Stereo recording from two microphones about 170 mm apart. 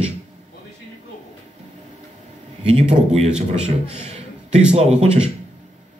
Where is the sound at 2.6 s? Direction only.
40° right (ahead or behind).